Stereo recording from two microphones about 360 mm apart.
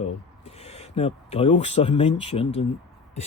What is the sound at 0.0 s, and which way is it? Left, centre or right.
Speech, centre.